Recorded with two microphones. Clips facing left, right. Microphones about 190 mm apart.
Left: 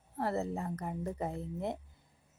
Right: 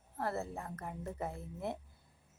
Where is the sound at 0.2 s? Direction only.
15° left (ahead or behind).